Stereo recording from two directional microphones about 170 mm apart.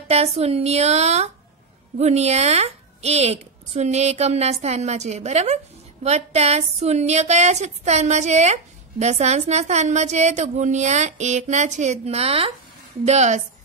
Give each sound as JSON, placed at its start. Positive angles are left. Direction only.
{"t": 0.1, "sound": "a woman's voice", "side_deg": -40}